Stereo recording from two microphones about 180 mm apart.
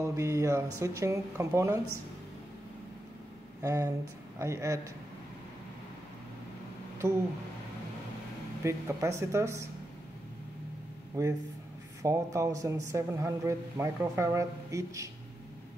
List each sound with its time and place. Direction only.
0.0 s a man's voice: 15° right (ahead or behind)
3.6 s a man's voice: 15° right (ahead or behind)
8.6 s a man's voice: 15° right (ahead or behind)
11.2 s a man's voice: 15° right (ahead or behind)